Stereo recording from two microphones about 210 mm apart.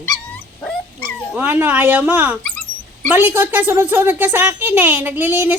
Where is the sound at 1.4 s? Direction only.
10° right (ahead or behind).